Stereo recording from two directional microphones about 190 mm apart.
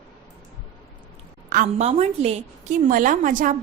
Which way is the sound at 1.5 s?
40° right (ahead or behind).